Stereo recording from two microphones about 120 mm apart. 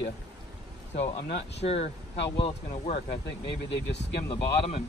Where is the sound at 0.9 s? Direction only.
65° left (ahead or behind).